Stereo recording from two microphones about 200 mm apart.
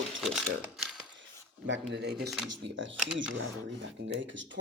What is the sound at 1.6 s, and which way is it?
Speech, 60° right (ahead or behind).